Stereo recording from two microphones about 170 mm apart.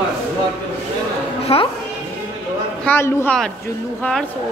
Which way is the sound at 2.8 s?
10° left (ahead or behind).